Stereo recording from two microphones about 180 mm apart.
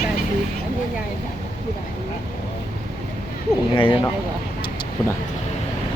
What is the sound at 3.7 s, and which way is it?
Speech, 30° left (ahead or behind).